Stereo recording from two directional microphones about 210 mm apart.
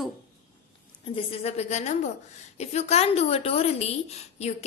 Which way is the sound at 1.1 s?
30° left (ahead or behind).